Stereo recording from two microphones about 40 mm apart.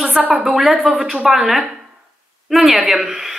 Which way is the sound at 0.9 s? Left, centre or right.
Right.